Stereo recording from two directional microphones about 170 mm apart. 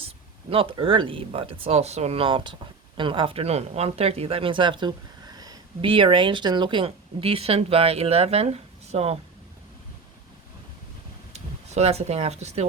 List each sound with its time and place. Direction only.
0.5 s speech: 35° right (ahead or behind)
11.3 s speech: 40° right (ahead or behind)